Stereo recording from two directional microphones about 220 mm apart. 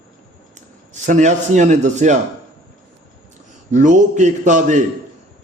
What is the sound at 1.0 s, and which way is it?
A man's voice, 35° right (ahead or behind).